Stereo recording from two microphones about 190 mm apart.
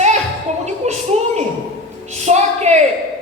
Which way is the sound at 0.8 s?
35° right (ahead or behind).